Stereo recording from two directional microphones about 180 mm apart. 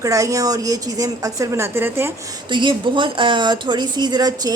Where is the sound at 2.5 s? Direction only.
25° right (ahead or behind).